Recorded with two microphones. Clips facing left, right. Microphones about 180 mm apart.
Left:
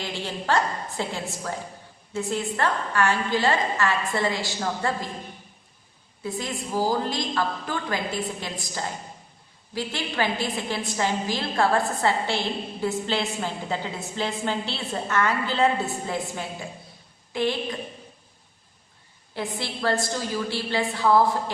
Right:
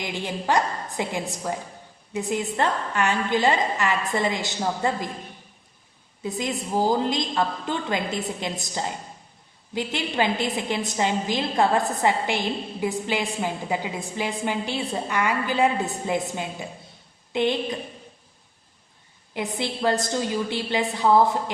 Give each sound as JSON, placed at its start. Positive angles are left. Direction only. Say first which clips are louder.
{"t": 0.0, "sound": "a woman's voice", "louder": "right 2 dB", "side_deg": -15}
{"t": 6.2, "sound": "a woman's voice", "louder": "right 3 dB", "side_deg": -20}
{"t": 19.3, "sound": "a woman's voice", "louder": "right 3 dB", "side_deg": -20}